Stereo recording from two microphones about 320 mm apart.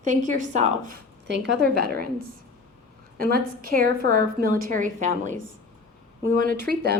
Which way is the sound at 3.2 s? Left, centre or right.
Right.